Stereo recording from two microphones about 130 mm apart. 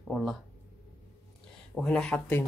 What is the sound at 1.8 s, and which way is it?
Speech, 5° left (ahead or behind).